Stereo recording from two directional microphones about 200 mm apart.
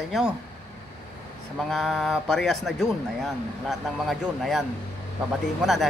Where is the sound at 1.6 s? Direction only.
Centre (ahead or behind).